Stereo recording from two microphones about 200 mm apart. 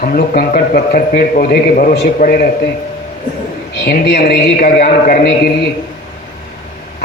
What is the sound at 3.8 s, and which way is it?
Speech, 50° left (ahead or behind).